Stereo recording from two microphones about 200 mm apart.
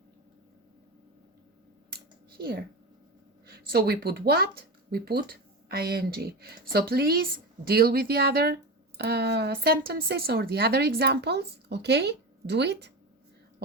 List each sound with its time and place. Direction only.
3.4 s speech: 50° right (ahead or behind)